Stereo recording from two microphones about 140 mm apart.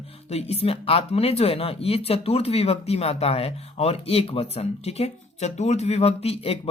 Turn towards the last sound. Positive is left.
turn(degrees=45)  # may be behind; listen again after turning